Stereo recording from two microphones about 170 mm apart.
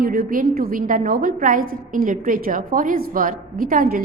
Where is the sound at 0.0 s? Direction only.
60° right (ahead or behind).